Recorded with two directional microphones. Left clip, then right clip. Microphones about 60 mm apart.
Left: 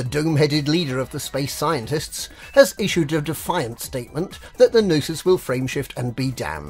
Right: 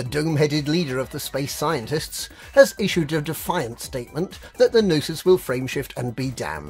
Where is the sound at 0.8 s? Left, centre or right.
Right.